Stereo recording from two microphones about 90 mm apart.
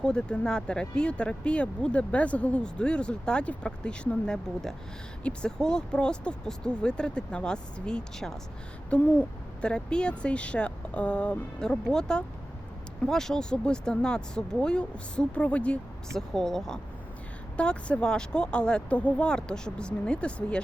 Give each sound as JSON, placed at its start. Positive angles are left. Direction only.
{"t": 0.0, "sound": "speech", "side_deg": 10}